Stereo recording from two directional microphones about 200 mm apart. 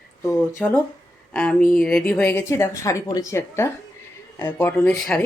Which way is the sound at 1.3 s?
5° left (ahead or behind).